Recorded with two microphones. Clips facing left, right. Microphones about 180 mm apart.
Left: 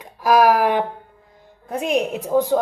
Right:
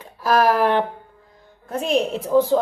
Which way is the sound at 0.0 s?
10° left (ahead or behind).